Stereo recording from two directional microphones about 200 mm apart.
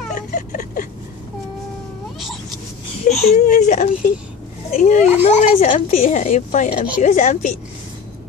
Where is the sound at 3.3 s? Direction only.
40° left (ahead or behind).